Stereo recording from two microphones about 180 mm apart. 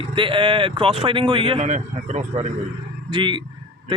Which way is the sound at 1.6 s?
45° right (ahead or behind).